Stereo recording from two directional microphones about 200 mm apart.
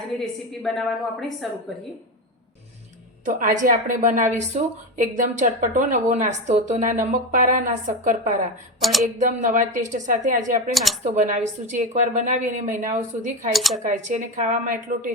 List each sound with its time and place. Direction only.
0.6 s a woman's voice: centre (ahead or behind)
3.2 s a woman's voice: 40° right (ahead or behind)
8.8 s a woman's voice: centre (ahead or behind)
9.1 s a woman's voice: 40° right (ahead or behind)
13.5 s a woman's voice: centre (ahead or behind)
13.9 s a woman's voice: 40° right (ahead or behind)